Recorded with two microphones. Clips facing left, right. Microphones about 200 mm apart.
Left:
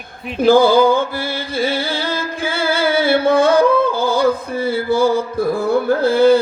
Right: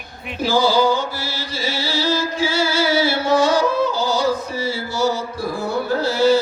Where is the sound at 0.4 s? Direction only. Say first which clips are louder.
Left 6 dB; 55° left (ahead or behind).